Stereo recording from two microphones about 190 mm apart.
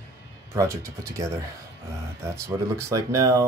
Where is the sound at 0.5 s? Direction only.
15° right (ahead or behind).